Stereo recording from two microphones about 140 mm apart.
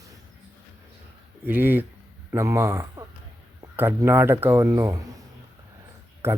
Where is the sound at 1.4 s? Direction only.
15° right (ahead or behind).